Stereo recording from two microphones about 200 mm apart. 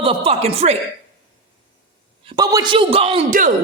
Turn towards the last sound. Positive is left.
turn(degrees=-40)  # may be behind; listen again after turning